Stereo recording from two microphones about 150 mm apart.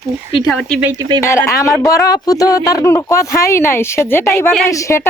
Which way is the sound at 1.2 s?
20° left (ahead or behind).